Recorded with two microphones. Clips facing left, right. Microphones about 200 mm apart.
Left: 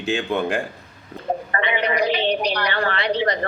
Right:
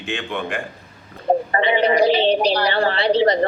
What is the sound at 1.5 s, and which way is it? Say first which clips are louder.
A woman's voice: right 5 dB; 30° right (ahead or behind).